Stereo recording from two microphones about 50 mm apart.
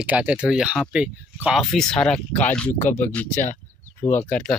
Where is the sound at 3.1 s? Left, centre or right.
Left.